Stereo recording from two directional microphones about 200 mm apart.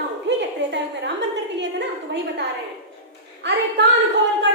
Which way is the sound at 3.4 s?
60° right (ahead or behind).